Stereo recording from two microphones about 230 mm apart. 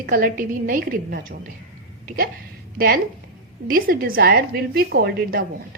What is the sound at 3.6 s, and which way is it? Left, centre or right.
A woman's voice, right.